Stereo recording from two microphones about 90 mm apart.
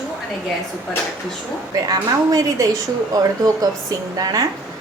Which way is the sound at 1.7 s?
40° right (ahead or behind).